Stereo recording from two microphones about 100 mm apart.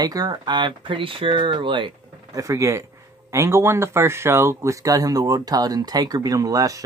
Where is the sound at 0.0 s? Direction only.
40° right (ahead or behind).